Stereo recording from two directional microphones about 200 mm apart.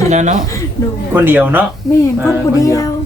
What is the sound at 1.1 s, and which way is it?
Speech, 10° right (ahead or behind).